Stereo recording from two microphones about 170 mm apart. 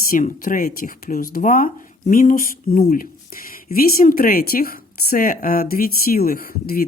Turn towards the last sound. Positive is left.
turn(degrees=60)  # may be behind; listen again after turning